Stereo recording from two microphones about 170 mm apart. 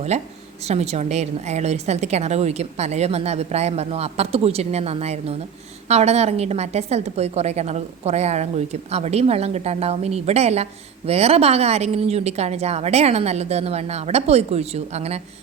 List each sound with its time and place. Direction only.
0.6 s a woman's voice: 40° right (ahead or behind)